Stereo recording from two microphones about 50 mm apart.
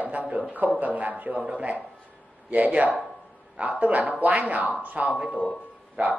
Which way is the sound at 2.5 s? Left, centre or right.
Right.